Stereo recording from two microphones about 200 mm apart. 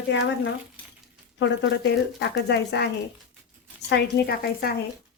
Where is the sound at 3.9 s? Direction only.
55° left (ahead or behind).